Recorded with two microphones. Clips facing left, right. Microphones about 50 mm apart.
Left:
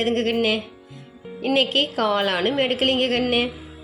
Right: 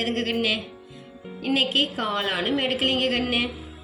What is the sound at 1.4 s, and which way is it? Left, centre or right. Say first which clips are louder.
Speech: left 3 dB; left.